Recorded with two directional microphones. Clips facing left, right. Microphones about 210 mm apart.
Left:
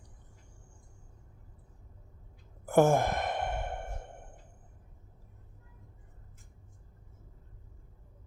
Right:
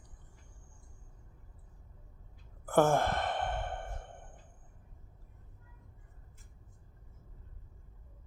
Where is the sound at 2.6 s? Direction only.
10° left (ahead or behind).